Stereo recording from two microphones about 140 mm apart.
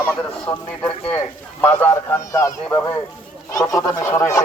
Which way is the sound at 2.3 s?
25° left (ahead or behind).